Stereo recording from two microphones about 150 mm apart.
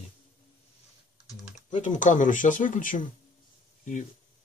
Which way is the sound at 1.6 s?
55° left (ahead or behind).